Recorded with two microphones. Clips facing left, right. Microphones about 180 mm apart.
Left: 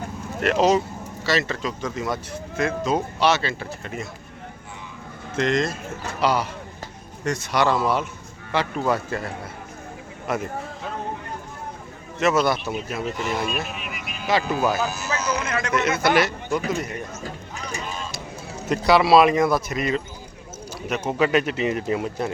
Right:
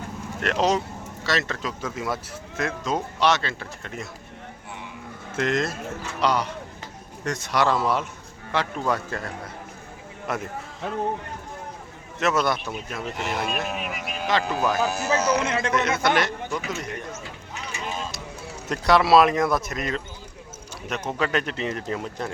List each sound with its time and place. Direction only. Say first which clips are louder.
0.3 s speech: left 4 dB; 5° left (ahead or behind)
5.3 s speech: left 2 dB; 5° right (ahead or behind)
12.2 s speech: left 3 dB; centre (ahead or behind)
13.7 s a sound: right 4 dB; 40° right (ahead or behind)
14.3 s speech: left 2 dB; 10° left (ahead or behind)
14.8 s speech: right 3 dB; 60° right (ahead or behind)
15.2 s speech: right 2 dB; 70° right (ahead or behind)
15.4 s a man's voice: right 1 dB; 25° right (ahead or behind)
15.7 s speech: left 4 dB; 5° left (ahead or behind)
16.6 s a man's voice: left 8 dB; 35° left (ahead or behind)
18.7 s speech: left 2 dB; centre (ahead or behind)
21.1 s speech: left 5 dB; 10° left (ahead or behind)